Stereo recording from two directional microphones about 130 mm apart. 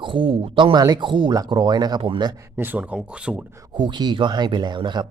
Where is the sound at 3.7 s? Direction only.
35° right (ahead or behind).